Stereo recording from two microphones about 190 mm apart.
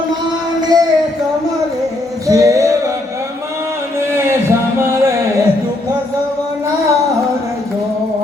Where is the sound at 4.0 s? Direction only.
15° right (ahead or behind).